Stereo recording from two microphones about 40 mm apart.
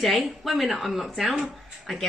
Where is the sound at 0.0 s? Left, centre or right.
Centre.